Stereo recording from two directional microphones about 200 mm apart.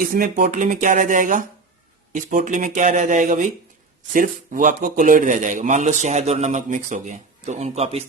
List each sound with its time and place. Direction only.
0.0 s a man's voice: 45° right (ahead or behind)